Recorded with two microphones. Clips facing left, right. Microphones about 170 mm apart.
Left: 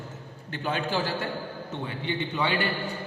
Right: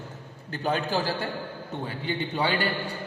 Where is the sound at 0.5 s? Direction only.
40° right (ahead or behind).